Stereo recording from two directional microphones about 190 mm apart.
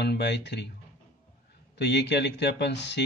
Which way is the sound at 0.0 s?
60° left (ahead or behind).